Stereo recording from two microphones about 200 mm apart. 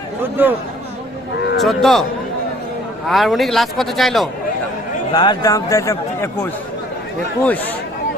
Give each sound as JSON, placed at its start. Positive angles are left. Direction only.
{"t": 0.2, "sound": "a man's voice", "side_deg": -10}
{"t": 1.6, "sound": "speech", "side_deg": 0}
{"t": 3.1, "sound": "speech", "side_deg": 0}
{"t": 5.1, "sound": "speech", "side_deg": 20}